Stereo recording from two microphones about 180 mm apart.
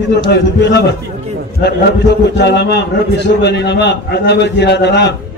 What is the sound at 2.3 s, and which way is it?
A man's voice, 70° left (ahead or behind).